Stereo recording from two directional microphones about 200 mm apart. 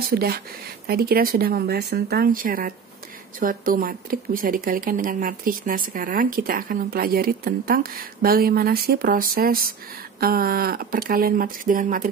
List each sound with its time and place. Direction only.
0.1 s speech: 50° right (ahead or behind)